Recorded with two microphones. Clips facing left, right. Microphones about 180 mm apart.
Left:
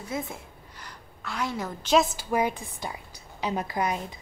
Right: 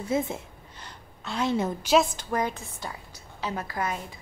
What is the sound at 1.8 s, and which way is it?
Speech, 5° right (ahead or behind).